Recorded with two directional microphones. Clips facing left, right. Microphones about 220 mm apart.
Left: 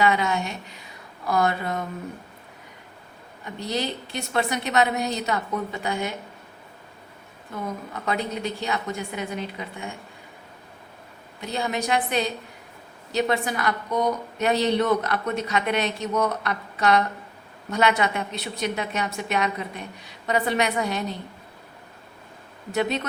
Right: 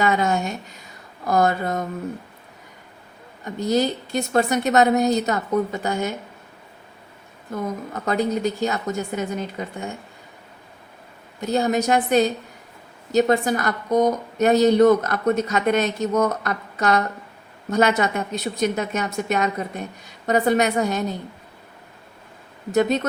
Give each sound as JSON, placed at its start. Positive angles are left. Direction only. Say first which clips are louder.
{"t": 0.0, "sound": "a woman's voice", "louder": "right 2 dB", "side_deg": -45}
{"t": 3.4, "sound": "a woman's voice", "louder": "right 7 dB", "side_deg": -45}
{"t": 7.5, "sound": "a woman's voice", "louder": "right 5 dB", "side_deg": -45}
{"t": 11.3, "sound": "a woman's voice", "louder": "right 7 dB", "side_deg": -45}
{"t": 22.7, "sound": "a woman's voice", "louder": "right 6 dB", "side_deg": -45}